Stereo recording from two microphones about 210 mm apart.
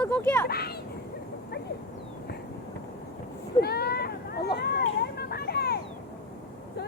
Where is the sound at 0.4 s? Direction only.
50° left (ahead or behind).